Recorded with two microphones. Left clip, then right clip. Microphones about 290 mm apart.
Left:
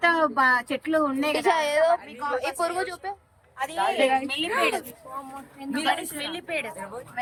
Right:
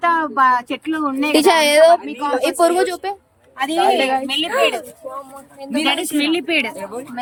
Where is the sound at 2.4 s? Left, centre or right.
Right.